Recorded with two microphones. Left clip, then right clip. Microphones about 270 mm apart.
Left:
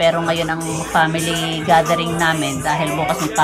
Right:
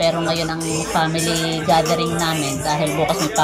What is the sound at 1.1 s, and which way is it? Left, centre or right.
Speech, left.